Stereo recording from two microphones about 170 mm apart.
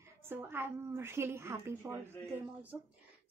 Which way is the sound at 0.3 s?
15° right (ahead or behind).